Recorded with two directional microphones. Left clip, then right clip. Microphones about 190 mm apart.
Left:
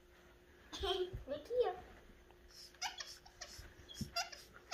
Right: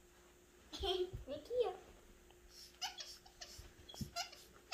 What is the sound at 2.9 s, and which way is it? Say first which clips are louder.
Baby laughter: left 2 dB; 55° right (ahead or behind).